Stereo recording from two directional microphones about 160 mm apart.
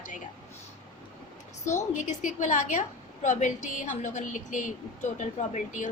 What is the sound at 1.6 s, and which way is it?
A woman's voice, 50° left (ahead or behind).